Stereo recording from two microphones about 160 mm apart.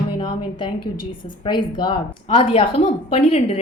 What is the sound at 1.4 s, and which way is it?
A woman's voice, 30° left (ahead or behind).